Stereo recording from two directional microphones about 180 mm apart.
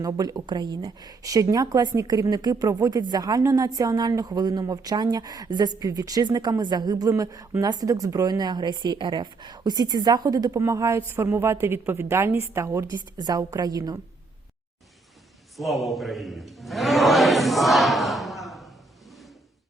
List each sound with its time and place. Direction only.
0.0 s a woman's voice: 20° right (ahead or behind)
15.5 s a man's voice: centre (ahead or behind)